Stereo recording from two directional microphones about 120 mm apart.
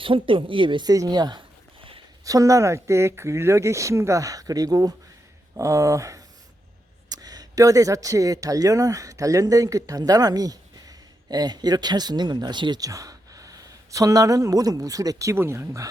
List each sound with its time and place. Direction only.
0.0 s speech: 45° right (ahead or behind)
2.2 s speech: 30° right (ahead or behind)